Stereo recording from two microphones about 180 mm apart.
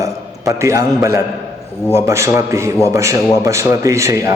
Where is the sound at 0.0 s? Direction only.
15° right (ahead or behind).